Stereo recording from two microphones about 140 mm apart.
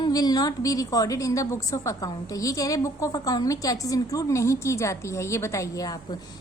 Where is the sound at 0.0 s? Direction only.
25° left (ahead or behind).